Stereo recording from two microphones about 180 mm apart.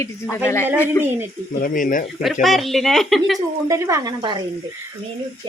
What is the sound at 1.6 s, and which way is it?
Speech, 50° left (ahead or behind).